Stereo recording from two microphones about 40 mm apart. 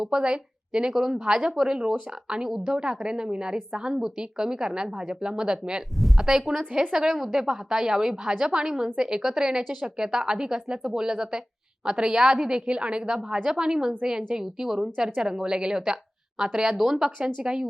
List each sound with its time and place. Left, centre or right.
0.0 s a woman's voice: centre
6.0 s speech: centre
6.2 s a woman's voice: centre